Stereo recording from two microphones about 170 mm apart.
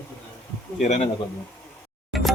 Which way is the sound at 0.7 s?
45° left (ahead or behind).